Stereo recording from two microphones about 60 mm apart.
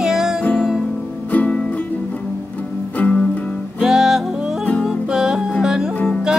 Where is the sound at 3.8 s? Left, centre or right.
Centre.